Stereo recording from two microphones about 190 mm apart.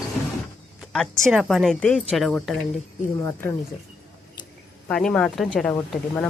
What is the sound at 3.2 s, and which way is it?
Speech, 15° left (ahead or behind).